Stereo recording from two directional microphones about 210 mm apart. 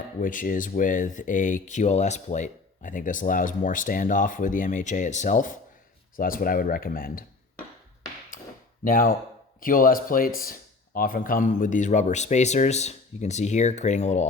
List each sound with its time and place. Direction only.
0.2 s speech: 40° left (ahead or behind)
8.3 s tap: 40° left (ahead or behind)
8.8 s speech: 40° left (ahead or behind)